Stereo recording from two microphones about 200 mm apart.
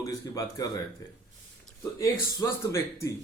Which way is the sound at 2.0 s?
15° left (ahead or behind).